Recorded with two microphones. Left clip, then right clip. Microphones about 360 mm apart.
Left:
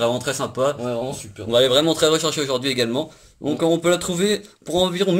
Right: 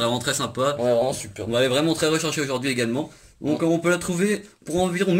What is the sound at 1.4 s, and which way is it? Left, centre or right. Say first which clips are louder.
Speech: left 5 dB; centre.